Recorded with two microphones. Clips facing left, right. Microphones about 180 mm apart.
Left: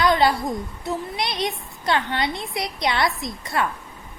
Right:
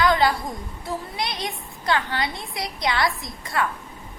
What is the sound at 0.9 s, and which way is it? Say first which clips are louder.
A child's voice: left 2 dB; 25° left (ahead or behind).